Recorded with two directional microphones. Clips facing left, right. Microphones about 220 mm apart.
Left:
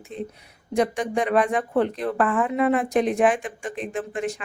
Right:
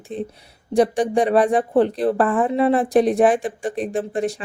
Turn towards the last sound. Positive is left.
turn(degrees=-35)  # may be behind; listen again after turning